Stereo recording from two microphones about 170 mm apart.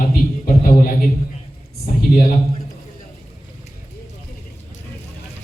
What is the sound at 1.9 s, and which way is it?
Speech, 55° left (ahead or behind).